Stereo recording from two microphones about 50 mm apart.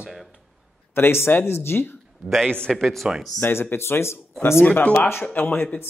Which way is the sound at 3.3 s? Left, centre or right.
Left.